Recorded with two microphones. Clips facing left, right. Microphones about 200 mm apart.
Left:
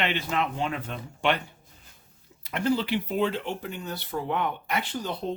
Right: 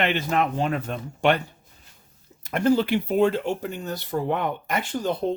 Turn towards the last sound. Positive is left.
turn(degrees=-45)  # may be behind; listen again after turning